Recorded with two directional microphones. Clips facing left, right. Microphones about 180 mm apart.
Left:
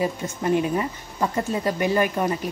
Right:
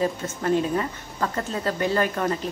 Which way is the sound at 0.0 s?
15° left (ahead or behind).